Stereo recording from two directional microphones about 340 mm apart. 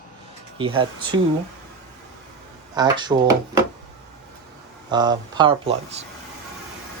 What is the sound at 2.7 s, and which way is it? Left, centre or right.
Speech, centre.